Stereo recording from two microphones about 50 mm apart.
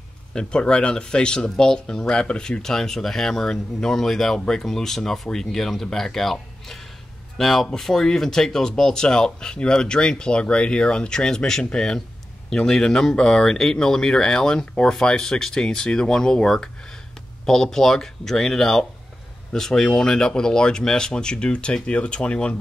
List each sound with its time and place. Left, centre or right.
0.3 s speech: centre